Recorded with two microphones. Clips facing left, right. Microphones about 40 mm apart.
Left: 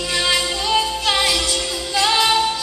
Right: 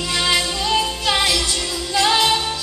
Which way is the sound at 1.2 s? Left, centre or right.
Left.